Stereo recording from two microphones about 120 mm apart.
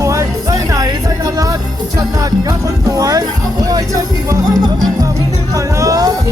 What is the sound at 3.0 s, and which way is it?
Speech, 30° right (ahead or behind).